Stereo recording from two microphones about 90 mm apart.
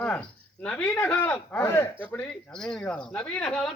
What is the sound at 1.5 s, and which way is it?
Speech, 25° left (ahead or behind).